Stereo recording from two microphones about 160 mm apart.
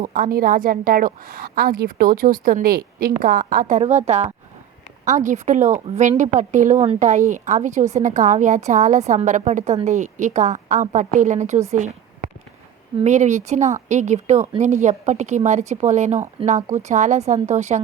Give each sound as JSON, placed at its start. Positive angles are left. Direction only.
{"t": 0.0, "sound": "a woman's voice", "side_deg": -60}
{"t": 13.1, "sound": "a woman's voice", "side_deg": -45}